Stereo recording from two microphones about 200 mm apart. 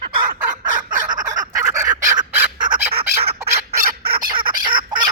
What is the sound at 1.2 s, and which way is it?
Fowl, 20° right (ahead or behind).